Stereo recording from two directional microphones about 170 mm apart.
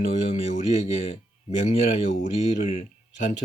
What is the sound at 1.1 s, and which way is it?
Speech, 40° left (ahead or behind).